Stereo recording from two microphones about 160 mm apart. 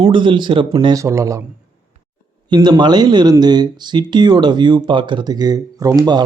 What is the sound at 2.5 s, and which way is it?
Speech, 25° right (ahead or behind).